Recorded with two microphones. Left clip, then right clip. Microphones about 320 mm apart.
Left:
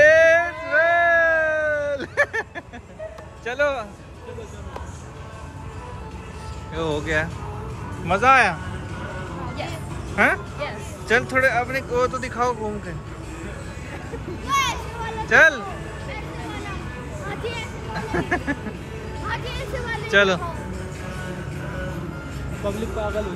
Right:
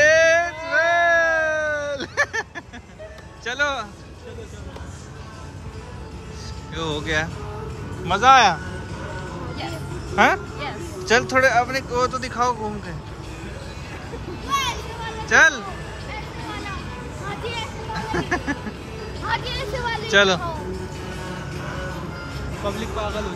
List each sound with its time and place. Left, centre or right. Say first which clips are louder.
0.0 s a sound: left 1 dB; centre
3.4 s speech: left 1 dB; centre
6.7 s speech: left 1 dB; centre
10.1 s speech: right 2 dB; centre
14.5 s a sound: left 2 dB; centre
15.2 s speech: even; centre
17.3 s music: right 1 dB; centre
19.2 s vehicle: right 4 dB; centre
22.7 s speech: even; centre